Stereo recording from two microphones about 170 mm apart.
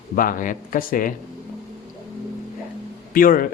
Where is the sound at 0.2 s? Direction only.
50° left (ahead or behind).